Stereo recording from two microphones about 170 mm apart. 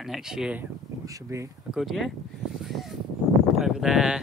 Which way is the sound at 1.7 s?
Centre (ahead or behind).